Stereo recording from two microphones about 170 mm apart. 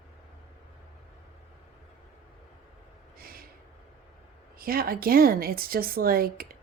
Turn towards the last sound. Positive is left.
turn(degrees=-60)  # may be behind; listen again after turning